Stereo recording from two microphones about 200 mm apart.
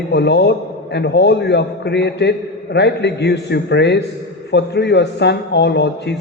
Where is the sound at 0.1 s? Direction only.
60° left (ahead or behind).